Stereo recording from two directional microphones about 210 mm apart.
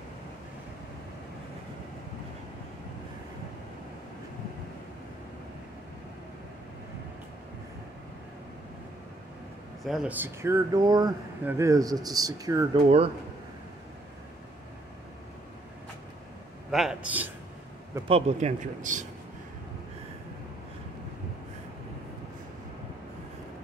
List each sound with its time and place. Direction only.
9.8 s speech: 5° right (ahead or behind)
12.8 s speech: 30° right (ahead or behind)
16.7 s a man's voice: 5° right (ahead or behind)
18.0 s a man's voice: 30° right (ahead or behind)